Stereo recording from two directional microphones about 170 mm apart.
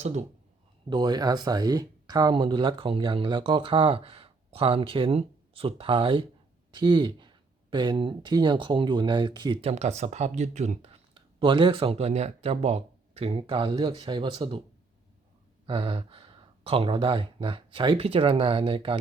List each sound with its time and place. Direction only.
0.0 s speech: 40° right (ahead or behind)
0.9 s speech: 25° right (ahead or behind)
15.6 s speech: 30° right (ahead or behind)